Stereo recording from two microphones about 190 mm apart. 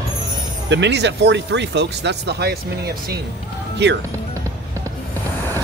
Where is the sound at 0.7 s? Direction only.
65° right (ahead or behind).